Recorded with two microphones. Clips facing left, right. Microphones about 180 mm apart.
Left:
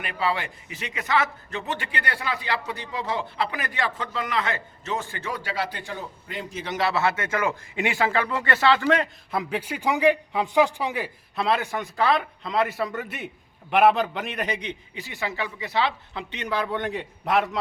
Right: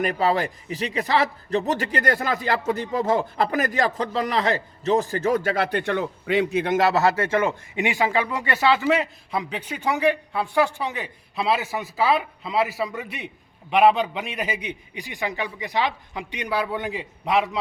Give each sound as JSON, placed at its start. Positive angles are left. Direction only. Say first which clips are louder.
{"t": 0.0, "sound": "a man's voice", "louder": "right 6 dB", "side_deg": -40}
{"t": 11.3, "sound": "a man's voice", "louder": "right 1 dB", "side_deg": -5}